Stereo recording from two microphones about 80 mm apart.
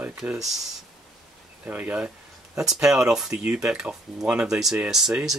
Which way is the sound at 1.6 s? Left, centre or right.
Right.